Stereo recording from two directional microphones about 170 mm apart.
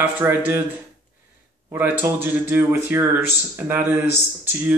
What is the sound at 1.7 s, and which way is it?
Speech, 10° right (ahead or behind).